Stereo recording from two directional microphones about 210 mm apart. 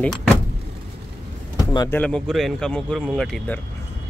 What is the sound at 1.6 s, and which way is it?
Speech, 15° left (ahead or behind).